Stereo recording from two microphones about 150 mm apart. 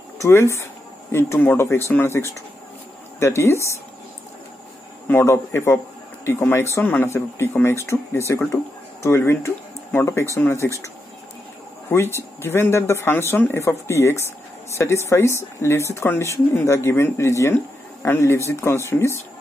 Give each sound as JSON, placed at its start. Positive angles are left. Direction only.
{"t": 0.2, "sound": "speech", "side_deg": 15}
{"t": 5.0, "sound": "speech", "side_deg": 15}
{"t": 11.9, "sound": "speech", "side_deg": 15}